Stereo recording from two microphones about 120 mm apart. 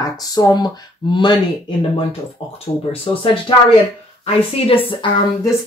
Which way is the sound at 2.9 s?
50° left (ahead or behind).